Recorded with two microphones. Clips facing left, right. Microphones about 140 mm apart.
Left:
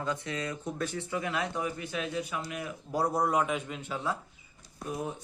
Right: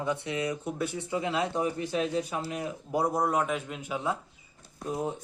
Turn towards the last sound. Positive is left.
turn(degrees=-25)  # may be behind; listen again after turning